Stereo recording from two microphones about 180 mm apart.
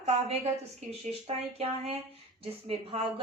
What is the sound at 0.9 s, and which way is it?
A woman's voice, 35° right (ahead or behind).